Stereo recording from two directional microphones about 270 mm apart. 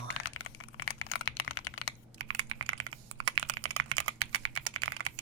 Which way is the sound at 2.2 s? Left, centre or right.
Right.